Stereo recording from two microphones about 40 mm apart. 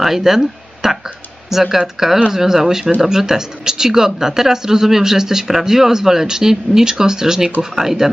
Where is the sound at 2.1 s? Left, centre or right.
Right.